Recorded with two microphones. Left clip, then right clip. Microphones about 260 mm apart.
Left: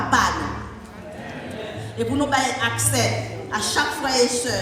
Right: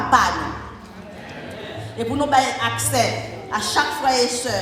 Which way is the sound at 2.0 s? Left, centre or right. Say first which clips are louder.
Right 3 dB; right.